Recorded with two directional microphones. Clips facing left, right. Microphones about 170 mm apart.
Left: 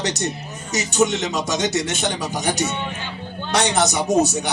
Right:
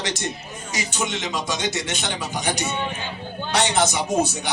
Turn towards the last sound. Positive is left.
turn(degrees=40)  # may be behind; listen again after turning